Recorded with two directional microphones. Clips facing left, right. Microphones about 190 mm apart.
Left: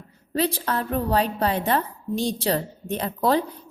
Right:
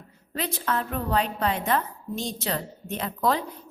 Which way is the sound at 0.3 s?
35° left (ahead or behind).